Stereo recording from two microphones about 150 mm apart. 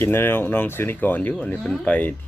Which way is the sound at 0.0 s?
15° left (ahead or behind).